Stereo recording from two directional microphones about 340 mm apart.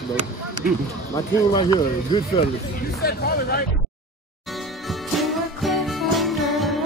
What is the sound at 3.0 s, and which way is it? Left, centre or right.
Speech, left.